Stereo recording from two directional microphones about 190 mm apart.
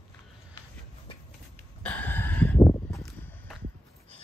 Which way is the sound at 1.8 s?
5° left (ahead or behind).